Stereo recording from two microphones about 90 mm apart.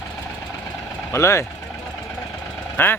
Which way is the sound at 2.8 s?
25° left (ahead or behind).